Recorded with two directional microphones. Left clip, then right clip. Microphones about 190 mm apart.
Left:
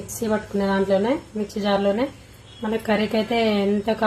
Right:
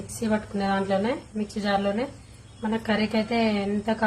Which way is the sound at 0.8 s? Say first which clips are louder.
Left 5 dB; 50° left (ahead or behind).